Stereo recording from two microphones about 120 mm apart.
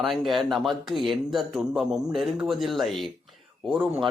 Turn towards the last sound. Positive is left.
turn(degrees=-15)  # may be behind; listen again after turning